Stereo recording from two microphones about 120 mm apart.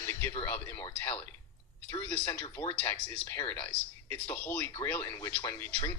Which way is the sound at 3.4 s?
15° left (ahead or behind).